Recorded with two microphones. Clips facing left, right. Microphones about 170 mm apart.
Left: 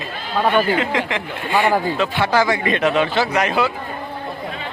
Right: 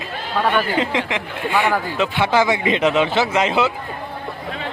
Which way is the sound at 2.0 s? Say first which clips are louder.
Even; 20° right (ahead or behind).